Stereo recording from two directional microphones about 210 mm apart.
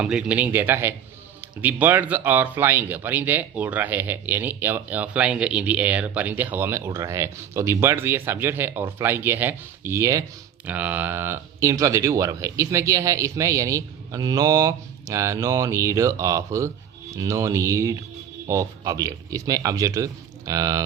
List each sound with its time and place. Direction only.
0.0 s speech: 5° right (ahead or behind)